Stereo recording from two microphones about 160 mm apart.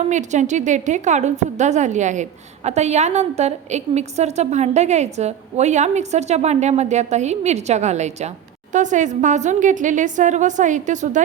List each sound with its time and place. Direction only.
0.1 s a woman's voice: 50° right (ahead or behind)